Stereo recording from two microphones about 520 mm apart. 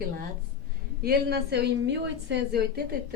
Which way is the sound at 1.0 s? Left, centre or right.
Centre.